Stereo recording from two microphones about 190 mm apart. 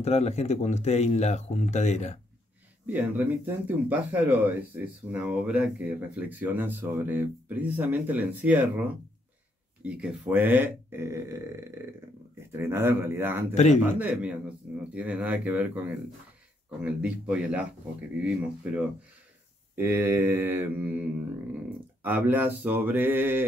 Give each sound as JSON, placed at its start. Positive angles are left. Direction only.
{"t": 0.0, "sound": "speech", "side_deg": 35}
{"t": 2.9, "sound": "speech", "side_deg": -10}
{"t": 12.5, "sound": "speech", "side_deg": -10}
{"t": 16.8, "sound": "speech", "side_deg": -5}
{"t": 19.7, "sound": "speech", "side_deg": -10}